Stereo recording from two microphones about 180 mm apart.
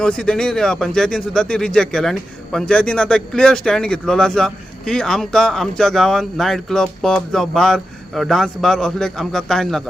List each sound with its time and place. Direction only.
0.0 s speech: 5° left (ahead or behind)